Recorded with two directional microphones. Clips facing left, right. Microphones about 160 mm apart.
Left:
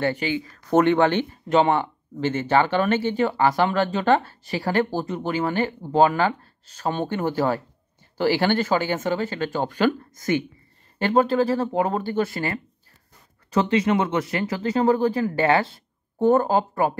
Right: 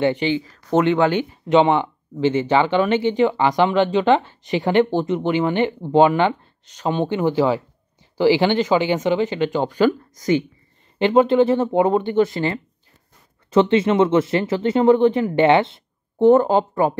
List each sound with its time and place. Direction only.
0.0 s speech: 20° right (ahead or behind)